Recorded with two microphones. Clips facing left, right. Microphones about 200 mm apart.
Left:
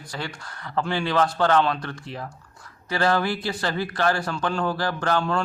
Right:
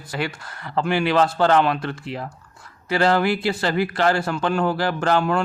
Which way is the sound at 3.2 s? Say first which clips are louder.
Right 6 dB; 65° right (ahead or behind).